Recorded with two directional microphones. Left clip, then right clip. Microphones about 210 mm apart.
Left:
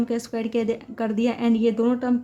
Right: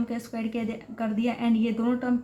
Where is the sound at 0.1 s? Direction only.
40° left (ahead or behind).